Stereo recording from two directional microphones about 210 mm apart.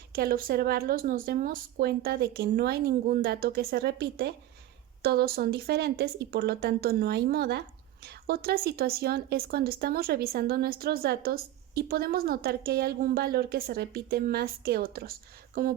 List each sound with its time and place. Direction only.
0.1 s speech: 45° right (ahead or behind)